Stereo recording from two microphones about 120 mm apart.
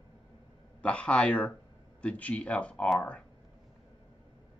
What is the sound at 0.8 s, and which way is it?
Speech, 10° left (ahead or behind).